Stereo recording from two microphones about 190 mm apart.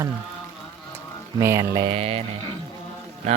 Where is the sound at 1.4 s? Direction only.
15° right (ahead or behind).